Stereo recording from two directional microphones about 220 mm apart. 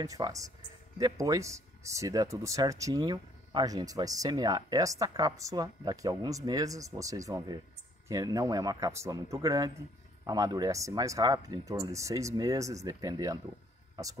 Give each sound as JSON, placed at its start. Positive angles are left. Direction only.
{"t": 0.0, "sound": "speech", "side_deg": -15}